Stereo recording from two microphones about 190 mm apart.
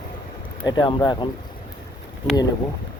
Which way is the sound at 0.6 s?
20° left (ahead or behind).